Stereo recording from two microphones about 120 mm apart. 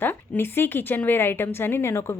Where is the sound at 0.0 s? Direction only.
15° left (ahead or behind).